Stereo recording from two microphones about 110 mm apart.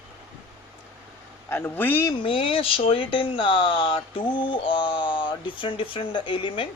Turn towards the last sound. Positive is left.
turn(degrees=50)  # may be behind; listen again after turning